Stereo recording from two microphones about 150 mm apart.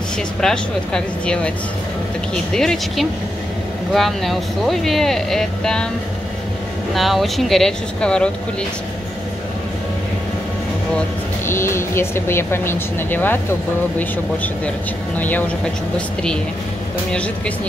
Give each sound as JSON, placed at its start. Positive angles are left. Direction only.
{"t": 0.4, "sound": "speech", "side_deg": 5}
{"t": 2.5, "sound": "speech", "side_deg": 5}
{"t": 6.9, "sound": "speech", "side_deg": 0}
{"t": 11.4, "sound": "speech", "side_deg": 15}